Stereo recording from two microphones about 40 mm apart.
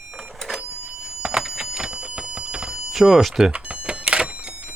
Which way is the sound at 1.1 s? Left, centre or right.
Centre.